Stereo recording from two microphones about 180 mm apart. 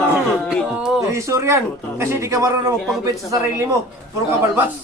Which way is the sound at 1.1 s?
15° right (ahead or behind).